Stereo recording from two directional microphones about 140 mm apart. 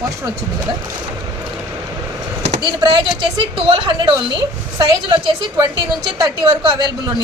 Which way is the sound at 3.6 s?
40° right (ahead or behind).